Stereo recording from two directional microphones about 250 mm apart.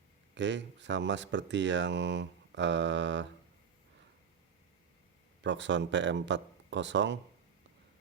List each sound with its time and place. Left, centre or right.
0.3 s speech: right
5.4 s speech: right